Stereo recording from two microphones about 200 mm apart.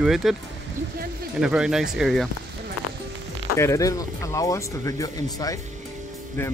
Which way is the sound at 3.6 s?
15° left (ahead or behind).